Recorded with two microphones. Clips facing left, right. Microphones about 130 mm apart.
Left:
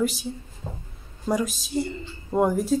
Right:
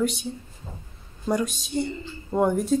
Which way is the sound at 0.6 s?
65° left (ahead or behind).